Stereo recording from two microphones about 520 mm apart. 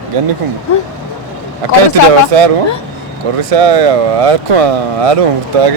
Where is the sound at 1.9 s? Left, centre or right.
Right.